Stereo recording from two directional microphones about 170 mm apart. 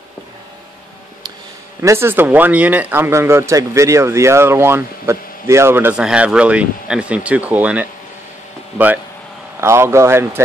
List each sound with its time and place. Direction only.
1.8 s speech: 15° right (ahead or behind)